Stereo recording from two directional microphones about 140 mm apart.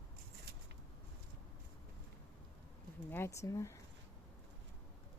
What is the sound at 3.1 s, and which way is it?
Speech, 20° left (ahead or behind).